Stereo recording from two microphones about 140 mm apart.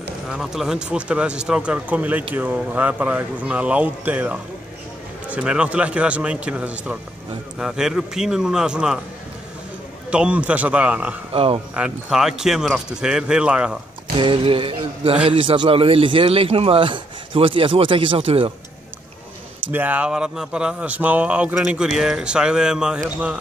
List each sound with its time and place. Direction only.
0.3 s speech: 5° right (ahead or behind)
10.1 s speech: 10° right (ahead or behind)
11.3 s a man's voice: 40° right (ahead or behind)
11.7 s speech: 5° right (ahead or behind)
14.1 s a man's voice: 40° right (ahead or behind)
19.7 s speech: 10° right (ahead or behind)